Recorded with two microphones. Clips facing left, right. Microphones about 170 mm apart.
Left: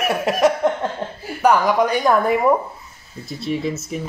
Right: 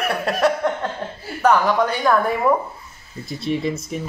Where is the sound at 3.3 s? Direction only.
Centre (ahead or behind).